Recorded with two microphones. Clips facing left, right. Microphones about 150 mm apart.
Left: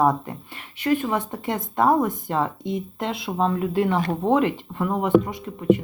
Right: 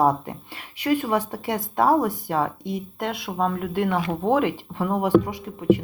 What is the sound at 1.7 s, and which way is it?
Speech, 5° right (ahead or behind).